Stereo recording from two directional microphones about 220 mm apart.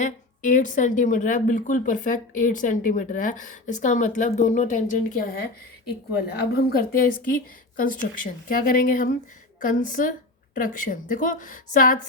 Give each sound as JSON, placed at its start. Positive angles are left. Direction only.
{"t": 0.0, "sound": "speech", "side_deg": 35}
{"t": 6.7, "sound": "speech", "side_deg": 40}